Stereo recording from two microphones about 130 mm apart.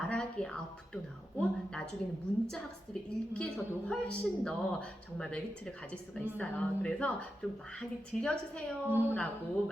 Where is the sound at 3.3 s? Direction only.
5° left (ahead or behind).